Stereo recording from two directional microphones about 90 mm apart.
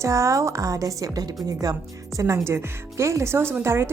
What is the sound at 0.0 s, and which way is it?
Speech, 35° right (ahead or behind).